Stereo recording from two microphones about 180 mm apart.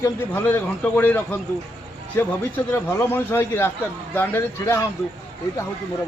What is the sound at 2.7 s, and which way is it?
A man's voice, 10° left (ahead or behind).